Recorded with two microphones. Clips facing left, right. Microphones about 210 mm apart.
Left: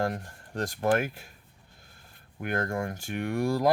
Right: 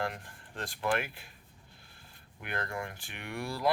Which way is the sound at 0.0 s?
40° left (ahead or behind).